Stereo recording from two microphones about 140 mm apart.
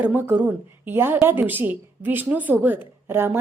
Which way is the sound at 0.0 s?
15° right (ahead or behind).